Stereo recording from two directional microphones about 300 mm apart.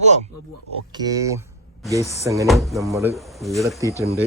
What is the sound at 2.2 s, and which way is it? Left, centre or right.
Speech, centre.